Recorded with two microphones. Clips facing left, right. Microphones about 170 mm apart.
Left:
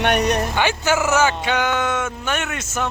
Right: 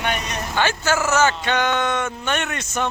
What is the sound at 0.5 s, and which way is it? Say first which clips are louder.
Speech: left 1 dB; 15° left (ahead or behind).